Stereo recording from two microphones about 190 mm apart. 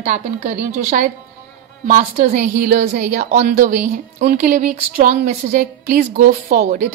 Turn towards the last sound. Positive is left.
turn(degrees=-40)  # may be behind; listen again after turning